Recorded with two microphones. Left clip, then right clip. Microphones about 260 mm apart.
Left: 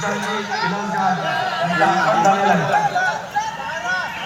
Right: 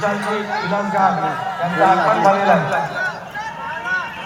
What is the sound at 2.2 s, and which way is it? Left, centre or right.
Speech, centre.